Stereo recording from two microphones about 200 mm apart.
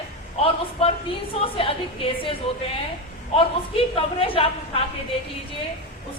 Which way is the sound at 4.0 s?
25° left (ahead or behind).